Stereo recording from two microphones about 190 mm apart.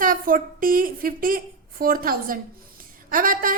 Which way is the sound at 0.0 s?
45° right (ahead or behind).